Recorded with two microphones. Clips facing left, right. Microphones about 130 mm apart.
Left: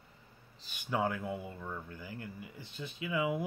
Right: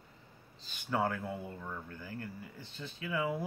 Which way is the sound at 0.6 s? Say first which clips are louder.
Even; 10° left (ahead or behind).